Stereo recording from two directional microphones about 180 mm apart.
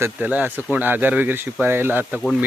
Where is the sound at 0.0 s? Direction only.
10° right (ahead or behind).